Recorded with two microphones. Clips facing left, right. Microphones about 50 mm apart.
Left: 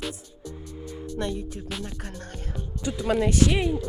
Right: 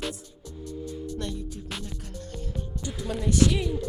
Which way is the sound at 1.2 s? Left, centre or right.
Left.